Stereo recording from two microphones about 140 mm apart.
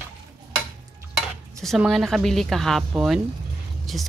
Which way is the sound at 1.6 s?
Centre (ahead or behind).